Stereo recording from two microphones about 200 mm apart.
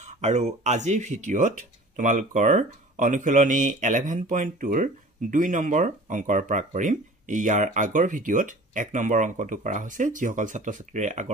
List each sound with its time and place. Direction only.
0.0 s speech: 35° right (ahead or behind)